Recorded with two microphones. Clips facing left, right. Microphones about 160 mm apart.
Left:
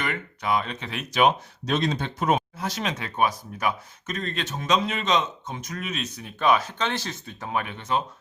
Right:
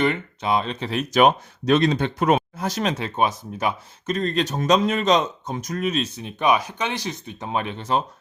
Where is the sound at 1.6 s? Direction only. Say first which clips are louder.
Right 7 dB; 65° right (ahead or behind).